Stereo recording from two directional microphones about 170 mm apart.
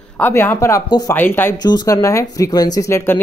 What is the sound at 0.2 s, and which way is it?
Speech, 15° left (ahead or behind).